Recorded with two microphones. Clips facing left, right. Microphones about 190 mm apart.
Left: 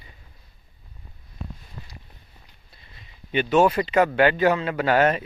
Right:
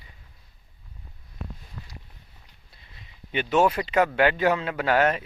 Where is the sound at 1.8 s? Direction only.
20° left (ahead or behind).